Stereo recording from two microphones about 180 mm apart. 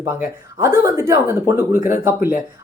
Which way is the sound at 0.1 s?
15° right (ahead or behind).